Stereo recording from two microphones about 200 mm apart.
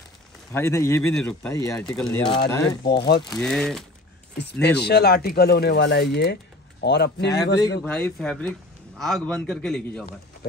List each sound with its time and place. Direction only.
0.5 s speech: 10° left (ahead or behind)
2.0 s speech: 25° left (ahead or behind)
2.8 s speech: 55° left (ahead or behind)
3.3 s a man's voice: 5° left (ahead or behind)
4.4 s speech: 55° left (ahead or behind)
7.8 s a man's voice: 5° left (ahead or behind)